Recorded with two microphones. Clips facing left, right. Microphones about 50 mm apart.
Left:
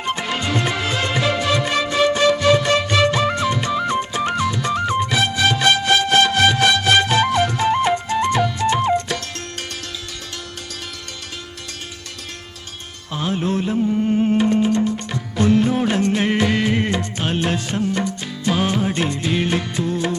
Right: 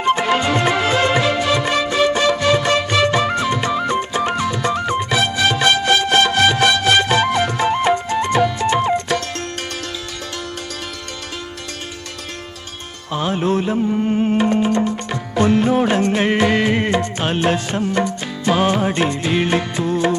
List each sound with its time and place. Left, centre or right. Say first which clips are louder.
0.0 s music: right 7 dB; right
13.1 s music: right 3 dB; right